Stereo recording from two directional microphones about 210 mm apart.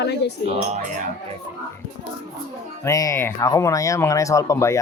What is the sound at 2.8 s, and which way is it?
Speech, 15° left (ahead or behind).